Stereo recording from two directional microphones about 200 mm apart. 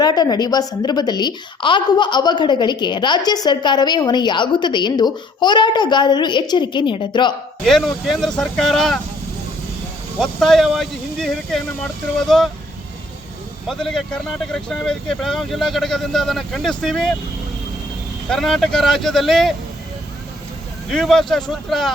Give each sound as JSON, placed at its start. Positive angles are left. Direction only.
{"t": 0.0, "sound": "a woman's voice", "side_deg": 20}
{"t": 7.6, "sound": "speech", "side_deg": 0}
{"t": 10.2, "sound": "speech", "side_deg": 0}
{"t": 13.7, "sound": "speech", "side_deg": 0}
{"t": 18.3, "sound": "speech", "side_deg": 0}
{"t": 20.9, "sound": "speech", "side_deg": 0}